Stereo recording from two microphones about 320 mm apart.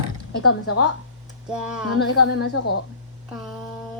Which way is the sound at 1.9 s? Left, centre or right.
Left.